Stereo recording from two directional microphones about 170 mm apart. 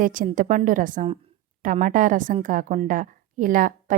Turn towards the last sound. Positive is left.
turn(degrees=-50)  # may be behind; listen again after turning